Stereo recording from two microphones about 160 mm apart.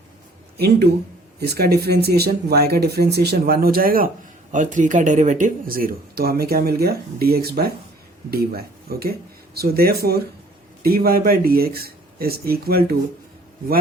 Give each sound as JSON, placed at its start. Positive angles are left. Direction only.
{"t": 0.5, "sound": "speech", "side_deg": -80}
{"t": 4.5, "sound": "speech", "side_deg": -55}